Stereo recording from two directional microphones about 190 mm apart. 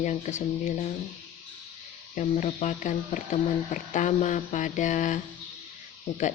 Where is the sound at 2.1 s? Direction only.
35° left (ahead or behind).